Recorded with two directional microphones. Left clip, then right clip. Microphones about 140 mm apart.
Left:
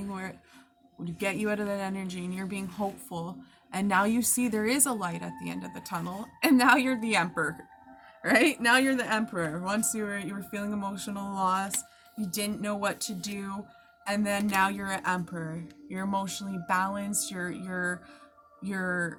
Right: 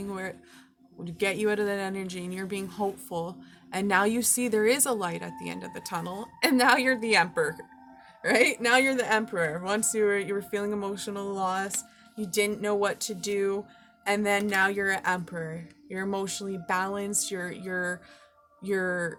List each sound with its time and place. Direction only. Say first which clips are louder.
0.1 s music: right 4 dB; 25° right (ahead or behind)
1.2 s a woman's voice: right 4 dB; 25° right (ahead or behind)
8.7 s a woman's voice: right 2 dB; 45° right (ahead or behind); by 19.1 s 30° right (ahead or behind)